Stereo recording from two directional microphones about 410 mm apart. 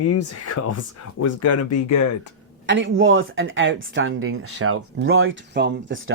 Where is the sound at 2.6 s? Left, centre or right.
Right.